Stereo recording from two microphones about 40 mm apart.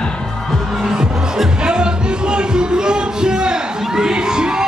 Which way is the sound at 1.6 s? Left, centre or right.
Right.